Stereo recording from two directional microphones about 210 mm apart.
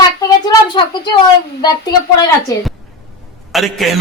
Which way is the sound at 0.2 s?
20° left (ahead or behind).